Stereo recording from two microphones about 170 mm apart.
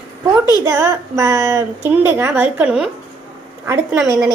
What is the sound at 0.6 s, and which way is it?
A woman's voice, 15° right (ahead or behind).